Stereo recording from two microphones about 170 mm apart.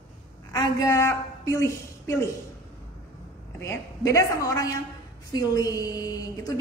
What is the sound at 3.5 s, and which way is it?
A woman's voice, 15° left (ahead or behind).